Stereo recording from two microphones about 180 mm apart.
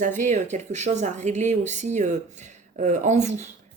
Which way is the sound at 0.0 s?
45° right (ahead or behind).